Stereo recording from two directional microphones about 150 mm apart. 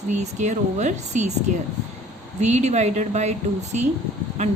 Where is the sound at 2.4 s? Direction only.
50° right (ahead or behind).